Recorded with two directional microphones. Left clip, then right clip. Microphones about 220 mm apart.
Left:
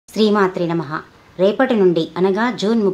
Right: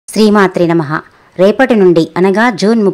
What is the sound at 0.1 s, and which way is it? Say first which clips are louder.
Speech: right 7 dB; 40° right (ahead or behind).